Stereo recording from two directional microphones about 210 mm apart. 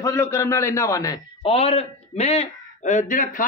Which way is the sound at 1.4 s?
25° left (ahead or behind).